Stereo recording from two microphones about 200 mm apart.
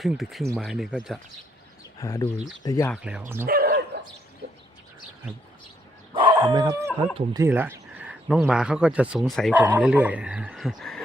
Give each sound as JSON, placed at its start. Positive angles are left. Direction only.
{"t": 0.0, "sound": "speech", "side_deg": 0}
{"t": 2.0, "sound": "speech", "side_deg": 15}
{"t": 2.9, "sound": "speech", "side_deg": -5}
{"t": 3.4, "sound": "dog", "side_deg": -50}
{"t": 6.1, "sound": "chicken", "side_deg": -20}
{"t": 7.3, "sound": "speech", "side_deg": -10}